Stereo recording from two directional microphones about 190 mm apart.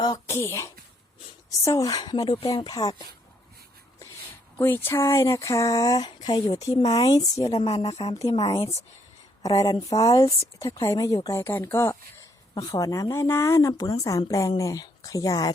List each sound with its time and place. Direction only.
0.0 s speech: 20° left (ahead or behind)
4.5 s speech: 10° left (ahead or behind)